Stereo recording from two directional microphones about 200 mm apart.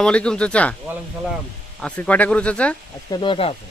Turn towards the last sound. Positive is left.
turn(degrees=25)  # may be behind; listen again after turning